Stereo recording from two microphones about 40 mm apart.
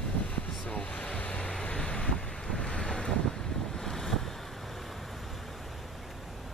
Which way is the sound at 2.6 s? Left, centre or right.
Centre.